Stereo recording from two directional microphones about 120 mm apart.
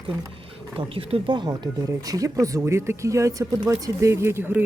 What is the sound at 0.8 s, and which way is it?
Speech, 50° right (ahead or behind).